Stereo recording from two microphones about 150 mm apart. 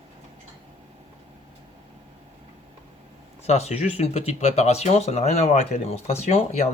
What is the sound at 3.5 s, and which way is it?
Speech, 45° left (ahead or behind).